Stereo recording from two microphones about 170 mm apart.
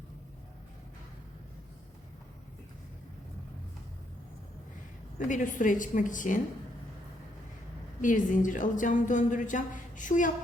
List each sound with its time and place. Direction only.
5.3 s a woman's voice: 50° left (ahead or behind)
8.0 s a woman's voice: 50° left (ahead or behind)